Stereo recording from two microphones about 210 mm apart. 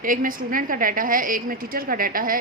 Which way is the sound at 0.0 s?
40° right (ahead or behind).